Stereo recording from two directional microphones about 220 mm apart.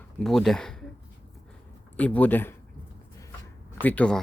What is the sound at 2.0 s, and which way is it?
Speech, 5° left (ahead or behind).